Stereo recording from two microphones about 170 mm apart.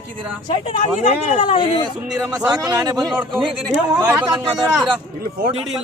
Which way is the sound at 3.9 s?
20° right (ahead or behind).